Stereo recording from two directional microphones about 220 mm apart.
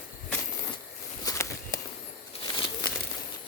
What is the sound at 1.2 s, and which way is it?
Walk, 15° left (ahead or behind).